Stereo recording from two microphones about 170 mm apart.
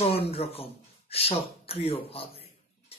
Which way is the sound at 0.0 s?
35° left (ahead or behind).